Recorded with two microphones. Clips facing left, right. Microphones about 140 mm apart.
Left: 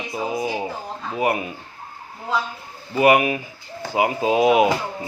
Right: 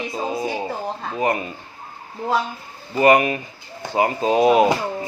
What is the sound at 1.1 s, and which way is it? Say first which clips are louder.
Speech: left 1 dB; 10° left (ahead or behind).